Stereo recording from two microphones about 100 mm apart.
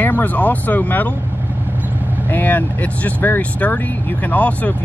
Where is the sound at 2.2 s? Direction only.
15° left (ahead or behind).